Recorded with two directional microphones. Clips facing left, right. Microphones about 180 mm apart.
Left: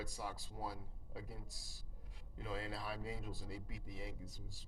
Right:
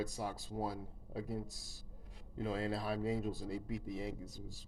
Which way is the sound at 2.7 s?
25° right (ahead or behind).